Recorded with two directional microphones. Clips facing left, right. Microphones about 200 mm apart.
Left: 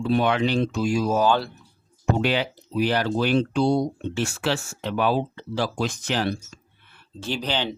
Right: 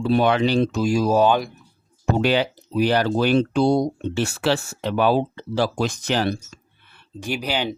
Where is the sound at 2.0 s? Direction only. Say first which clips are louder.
Right 3 dB; 40° right (ahead or behind).